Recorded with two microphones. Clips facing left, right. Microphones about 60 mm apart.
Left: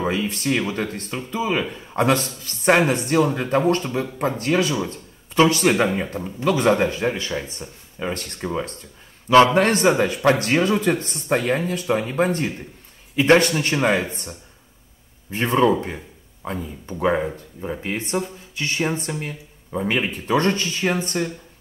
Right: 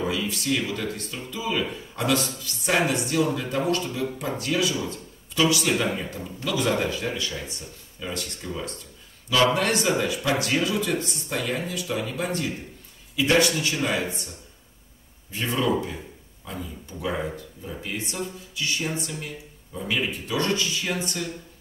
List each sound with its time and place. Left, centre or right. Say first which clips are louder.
0.0 s a man's voice: left 4 dB; left
15.3 s speech: left 7 dB; left